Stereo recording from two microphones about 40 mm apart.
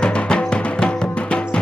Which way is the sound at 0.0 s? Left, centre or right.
Left.